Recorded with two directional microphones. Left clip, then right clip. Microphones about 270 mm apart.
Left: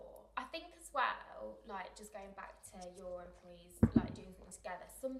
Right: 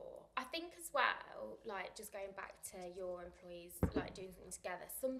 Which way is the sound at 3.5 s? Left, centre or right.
Right.